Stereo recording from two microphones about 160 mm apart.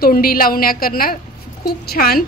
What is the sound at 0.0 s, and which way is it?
A woman's voice, 65° left (ahead or behind).